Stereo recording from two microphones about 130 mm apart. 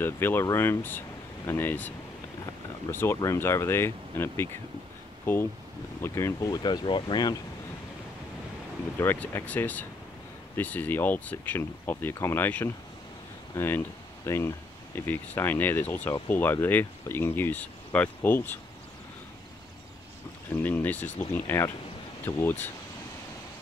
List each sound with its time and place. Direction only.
0.0 s speech: 15° left (ahead or behind)
6.5 s speech: 35° left (ahead or behind)
8.9 s speech: 15° left (ahead or behind)
20.6 s speech: 15° left (ahead or behind)